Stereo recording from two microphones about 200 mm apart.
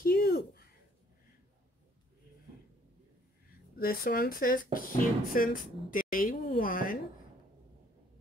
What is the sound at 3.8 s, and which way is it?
Speech, 45° left (ahead or behind).